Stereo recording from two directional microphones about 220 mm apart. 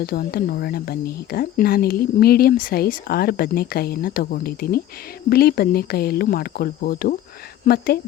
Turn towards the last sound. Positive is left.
turn(degrees=45)  # may be behind; listen again after turning